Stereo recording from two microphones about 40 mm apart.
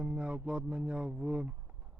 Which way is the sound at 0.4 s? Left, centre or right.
Right.